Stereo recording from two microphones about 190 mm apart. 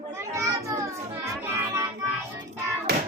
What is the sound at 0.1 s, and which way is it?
Children playing, 15° right (ahead or behind).